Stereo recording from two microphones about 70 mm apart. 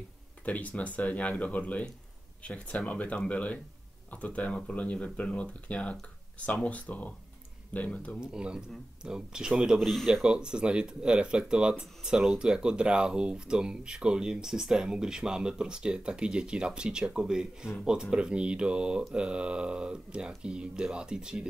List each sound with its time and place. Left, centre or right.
0.5 s speech: left
8.2 s speech: centre
9.8 s speech: centre
10.0 s speech: centre